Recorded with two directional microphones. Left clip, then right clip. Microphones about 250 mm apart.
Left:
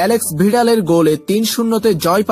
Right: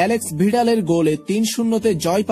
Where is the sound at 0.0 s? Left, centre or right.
Centre.